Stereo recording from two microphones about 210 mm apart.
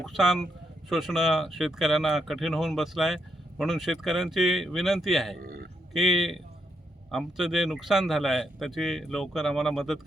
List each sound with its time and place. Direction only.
0.0 s speech: centre (ahead or behind)
5.4 s a sound: 45° right (ahead or behind)
5.9 s speech: centre (ahead or behind)